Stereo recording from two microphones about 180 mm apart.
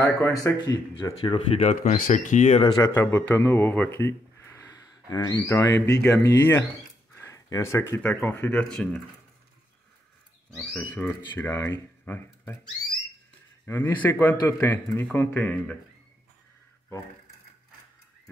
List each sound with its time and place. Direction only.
0.0 s speech: 15° left (ahead or behind)
1.7 s speech: 45° left (ahead or behind)
2.8 s speech: 10° left (ahead or behind)
7.2 s a sound: 15° left (ahead or behind)
7.9 s speech: 5° left (ahead or behind)
10.6 s speech: 10° left (ahead or behind)
13.7 s speech: 15° left (ahead or behind)